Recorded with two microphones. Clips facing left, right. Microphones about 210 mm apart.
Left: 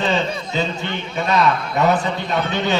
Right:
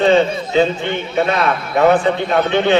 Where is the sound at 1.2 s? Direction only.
55° right (ahead or behind).